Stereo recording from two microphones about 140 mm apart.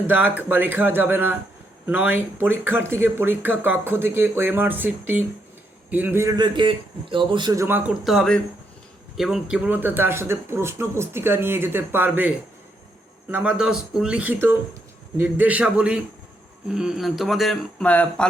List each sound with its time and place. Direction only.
0.1 s a man's voice: 15° right (ahead or behind); by 7.5 s 35° right (ahead or behind)
7.5 s a man's voice: 20° right (ahead or behind)
7.9 s speech: centre (ahead or behind)